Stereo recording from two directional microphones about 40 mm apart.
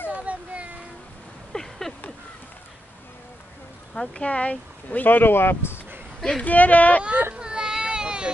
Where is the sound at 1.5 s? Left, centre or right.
Centre.